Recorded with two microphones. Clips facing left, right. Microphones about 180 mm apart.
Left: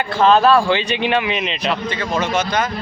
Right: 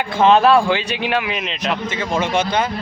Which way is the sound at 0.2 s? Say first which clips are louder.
Right 1 dB; 20° right (ahead or behind).